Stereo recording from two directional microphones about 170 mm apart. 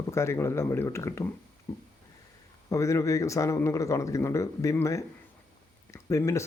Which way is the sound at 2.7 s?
20° left (ahead or behind).